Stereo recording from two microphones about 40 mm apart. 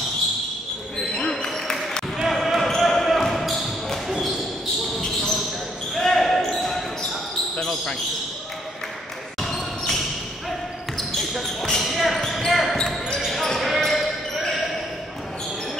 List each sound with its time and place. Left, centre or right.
0.9 s basketball bounce: centre
2.3 s basketball bounce: centre
5.0 s basketball bounce: centre
9.4 s basketball bounce: centre
11.3 s basketball bounce: centre
12.7 s basketball bounce: centre
13.3 s basketball bounce: centre